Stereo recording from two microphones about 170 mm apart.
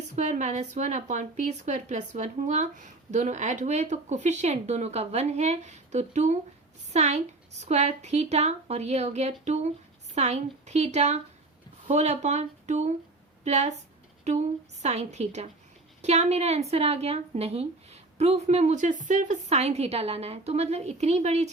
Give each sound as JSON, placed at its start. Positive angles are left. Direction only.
{"t": 0.2, "sound": "a woman's voice", "side_deg": -45}